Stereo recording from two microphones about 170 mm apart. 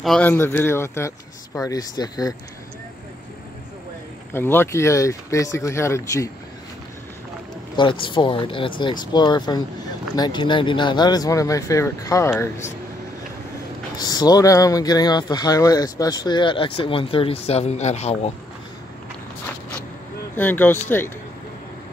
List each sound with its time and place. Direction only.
0.0 s speech: centre (ahead or behind)
0.3 s speech: 15° left (ahead or behind)
4.3 s speech: 10° left (ahead or behind)
7.7 s speech: 30° left (ahead or behind)
13.9 s speech: 25° left (ahead or behind); by 18.3 s 40° left (ahead or behind)
20.3 s speech: 10° left (ahead or behind)